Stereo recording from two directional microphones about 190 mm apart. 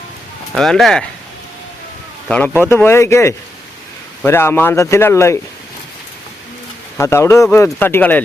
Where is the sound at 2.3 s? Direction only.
10° left (ahead or behind).